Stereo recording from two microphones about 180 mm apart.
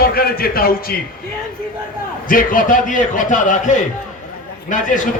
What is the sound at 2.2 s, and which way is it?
A man's voice, 50° left (ahead or behind).